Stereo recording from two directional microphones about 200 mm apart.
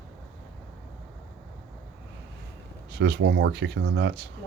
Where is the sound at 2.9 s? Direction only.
55° right (ahead or behind).